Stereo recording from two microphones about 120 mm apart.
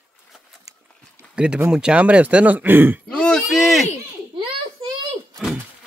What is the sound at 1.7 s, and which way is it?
Speech, 5° right (ahead or behind).